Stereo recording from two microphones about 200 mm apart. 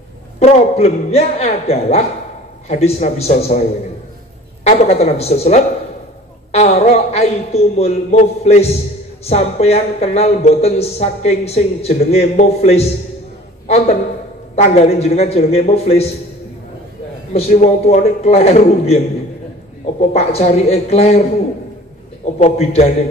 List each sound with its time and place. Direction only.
0.4 s a man's voice: 30° left (ahead or behind)
4.6 s a man's voice: 35° left (ahead or behind)
13.7 s a sound: 30° left (ahead or behind)
14.5 s a man's voice: 35° left (ahead or behind)
17.5 s a man's voice: 35° left (ahead or behind)
20.0 s a man's voice: 30° left (ahead or behind)
22.2 s a man's voice: 30° left (ahead or behind)